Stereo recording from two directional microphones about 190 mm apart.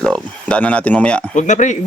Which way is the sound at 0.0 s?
5° left (ahead or behind).